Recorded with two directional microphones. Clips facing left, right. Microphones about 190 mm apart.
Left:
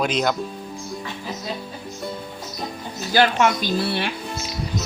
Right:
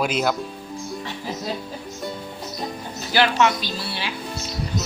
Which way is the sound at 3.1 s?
45° left (ahead or behind).